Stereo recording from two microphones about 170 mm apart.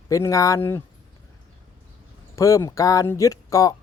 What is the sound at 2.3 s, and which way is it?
Speech, 20° left (ahead or behind).